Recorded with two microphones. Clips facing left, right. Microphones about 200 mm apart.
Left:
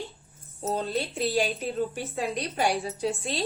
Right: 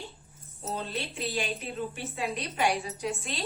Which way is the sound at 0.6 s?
35° left (ahead or behind).